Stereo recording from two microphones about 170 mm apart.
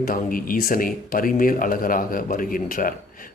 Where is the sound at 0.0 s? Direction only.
55° left (ahead or behind).